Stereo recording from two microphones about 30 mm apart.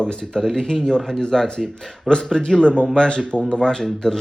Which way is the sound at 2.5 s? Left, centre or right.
Left.